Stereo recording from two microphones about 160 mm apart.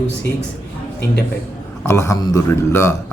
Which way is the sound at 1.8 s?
20° left (ahead or behind).